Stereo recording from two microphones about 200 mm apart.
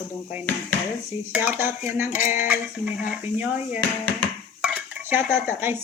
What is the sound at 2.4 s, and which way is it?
Cutlery, 10° right (ahead or behind).